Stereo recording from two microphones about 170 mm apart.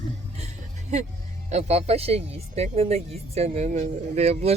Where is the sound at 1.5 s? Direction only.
40° right (ahead or behind).